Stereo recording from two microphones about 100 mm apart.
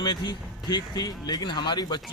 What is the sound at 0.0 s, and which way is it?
A man's voice, 45° left (ahead or behind).